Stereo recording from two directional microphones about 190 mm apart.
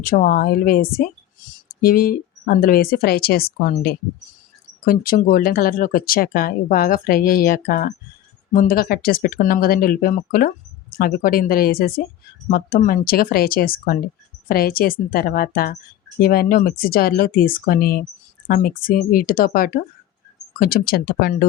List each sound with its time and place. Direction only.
0.0 s speech: 50° left (ahead or behind)